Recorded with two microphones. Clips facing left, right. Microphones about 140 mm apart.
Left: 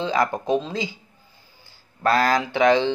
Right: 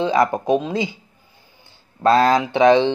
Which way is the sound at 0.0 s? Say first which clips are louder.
Right 5 dB; 20° right (ahead or behind).